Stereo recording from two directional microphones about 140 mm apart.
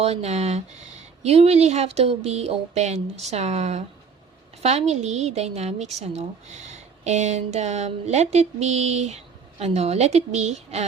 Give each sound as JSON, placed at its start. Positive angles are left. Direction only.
{"t": 0.0, "sound": "speech", "side_deg": -50}